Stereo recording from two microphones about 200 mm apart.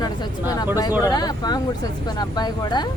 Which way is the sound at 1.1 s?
20° left (ahead or behind).